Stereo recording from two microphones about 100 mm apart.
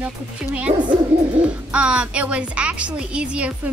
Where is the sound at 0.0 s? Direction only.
15° right (ahead or behind).